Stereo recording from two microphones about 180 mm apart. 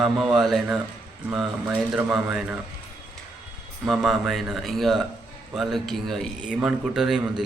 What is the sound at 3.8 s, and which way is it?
A man's voice, centre (ahead or behind).